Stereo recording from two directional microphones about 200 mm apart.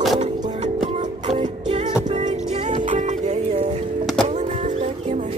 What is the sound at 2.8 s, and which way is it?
Music, 40° right (ahead or behind).